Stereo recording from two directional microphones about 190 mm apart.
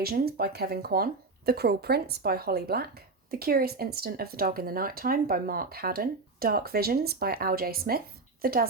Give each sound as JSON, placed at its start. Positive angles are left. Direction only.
{"t": 0.0, "sound": "speech", "side_deg": -55}